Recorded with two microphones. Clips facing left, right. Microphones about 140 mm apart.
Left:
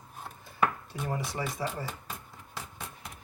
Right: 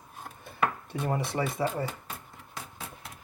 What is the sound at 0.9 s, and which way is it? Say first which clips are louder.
Speech: right 4 dB; 60° right (ahead or behind).